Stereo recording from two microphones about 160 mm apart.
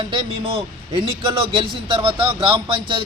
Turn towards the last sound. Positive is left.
turn(degrees=-30)  # may be behind; listen again after turning